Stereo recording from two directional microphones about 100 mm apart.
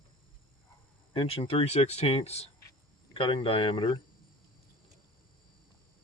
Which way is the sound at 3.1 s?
60° left (ahead or behind).